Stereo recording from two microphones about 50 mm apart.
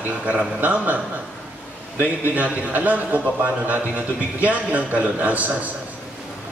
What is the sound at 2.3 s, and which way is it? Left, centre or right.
A man's voice, right.